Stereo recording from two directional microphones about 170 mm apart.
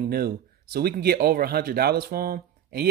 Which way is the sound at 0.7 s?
65° right (ahead or behind).